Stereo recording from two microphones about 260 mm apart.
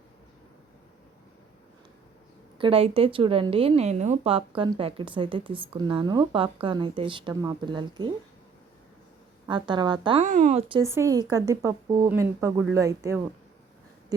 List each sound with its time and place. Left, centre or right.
2.6 s a woman's voice: right
9.5 s speech: centre
10.2 s speech: right; by 13.2 s centre